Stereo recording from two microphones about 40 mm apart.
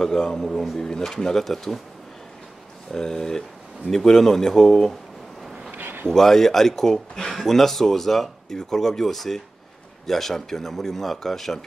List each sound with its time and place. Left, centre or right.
0.0 s speech: centre
2.9 s speech: centre
5.8 s a sound: right
6.0 s speech: centre